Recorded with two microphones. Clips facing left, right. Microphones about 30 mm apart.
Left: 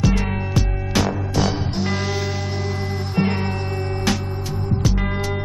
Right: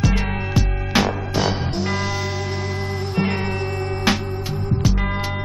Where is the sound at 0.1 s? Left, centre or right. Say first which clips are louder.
Even; centre.